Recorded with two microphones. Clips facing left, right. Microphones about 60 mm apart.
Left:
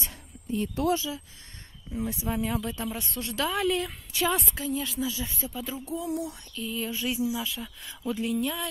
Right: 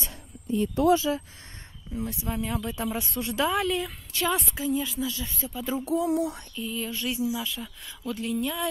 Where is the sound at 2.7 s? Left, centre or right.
Centre.